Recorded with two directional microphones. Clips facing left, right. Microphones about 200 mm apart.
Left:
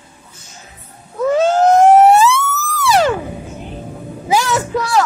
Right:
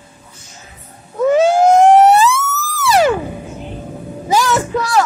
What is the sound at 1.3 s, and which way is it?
Police car, 10° right (ahead or behind).